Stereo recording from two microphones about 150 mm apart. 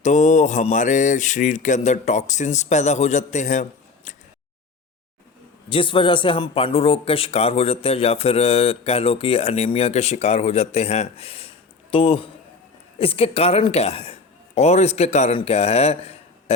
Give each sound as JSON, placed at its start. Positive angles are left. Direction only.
{"t": 0.0, "sound": "mantra", "side_deg": 50}
{"t": 5.6, "sound": "a man's voice", "side_deg": 35}
{"t": 15.4, "sound": "mantra", "side_deg": 40}